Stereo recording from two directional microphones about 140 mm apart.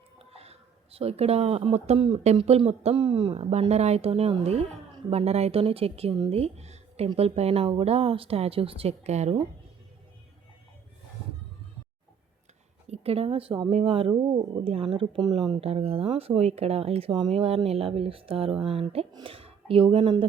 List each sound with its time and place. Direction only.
0.2 s a sound: 45° right (ahead or behind)
2.2 s speech: 45° right (ahead or behind)
12.9 s speech: 45° right (ahead or behind)